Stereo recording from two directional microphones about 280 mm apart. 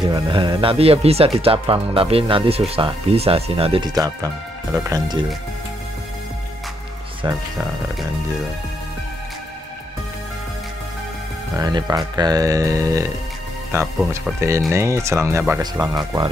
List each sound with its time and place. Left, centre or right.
0.1 s speech: centre
7.2 s speech: centre
11.5 s speech: centre